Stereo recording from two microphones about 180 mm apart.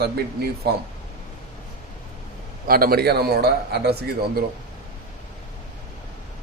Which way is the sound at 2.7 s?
55° right (ahead or behind).